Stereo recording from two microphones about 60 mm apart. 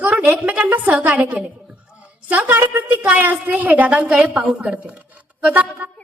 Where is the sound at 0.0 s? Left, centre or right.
Right.